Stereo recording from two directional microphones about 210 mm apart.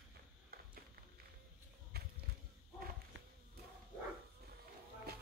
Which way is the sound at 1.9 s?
50° right (ahead or behind).